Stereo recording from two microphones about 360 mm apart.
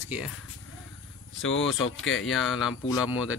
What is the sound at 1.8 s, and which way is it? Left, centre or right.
Speech, left.